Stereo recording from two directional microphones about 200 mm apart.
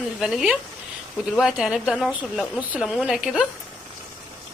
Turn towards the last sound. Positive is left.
turn(degrees=0)  # may be behind; listen again after turning